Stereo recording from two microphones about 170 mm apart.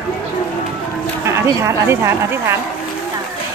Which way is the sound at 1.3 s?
15° right (ahead or behind).